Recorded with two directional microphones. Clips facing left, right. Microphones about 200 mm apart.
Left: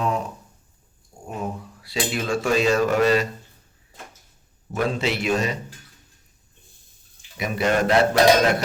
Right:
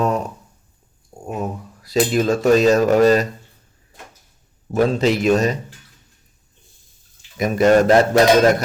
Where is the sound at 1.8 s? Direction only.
40° right (ahead or behind).